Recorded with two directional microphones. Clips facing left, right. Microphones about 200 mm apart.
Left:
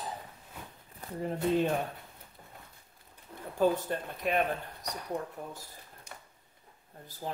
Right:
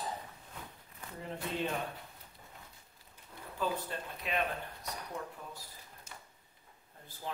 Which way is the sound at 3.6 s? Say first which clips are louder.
Left 8 dB; 50° left (ahead or behind).